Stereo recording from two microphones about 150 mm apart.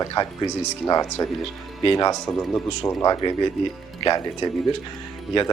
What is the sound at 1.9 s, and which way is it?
Speech, 25° left (ahead or behind).